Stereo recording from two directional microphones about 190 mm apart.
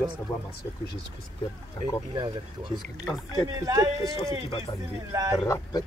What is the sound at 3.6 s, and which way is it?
Speech, 20° right (ahead or behind).